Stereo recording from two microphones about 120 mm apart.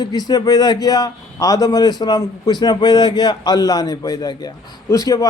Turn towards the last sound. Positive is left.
turn(degrees=30)  # may be behind; listen again after turning